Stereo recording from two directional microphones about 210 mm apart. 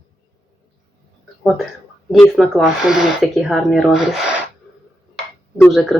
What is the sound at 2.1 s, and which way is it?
Speech, centre (ahead or behind).